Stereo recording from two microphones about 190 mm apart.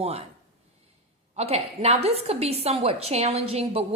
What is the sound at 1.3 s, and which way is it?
A woman's voice, 35° right (ahead or behind).